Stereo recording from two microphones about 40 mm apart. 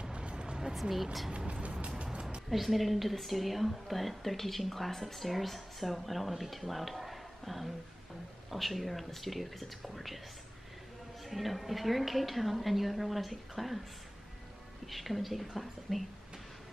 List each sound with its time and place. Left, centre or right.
0.0 s vehicle: right
0.7 s a woman's voice: centre
1.5 s music: right
2.5 s a woman's voice: centre
11.2 s a woman's voice: centre
14.9 s a woman's voice: centre